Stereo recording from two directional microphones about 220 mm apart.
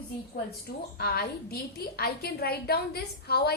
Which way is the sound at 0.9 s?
45° left (ahead or behind).